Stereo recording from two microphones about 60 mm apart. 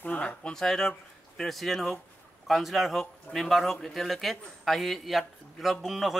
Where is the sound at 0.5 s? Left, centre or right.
Centre.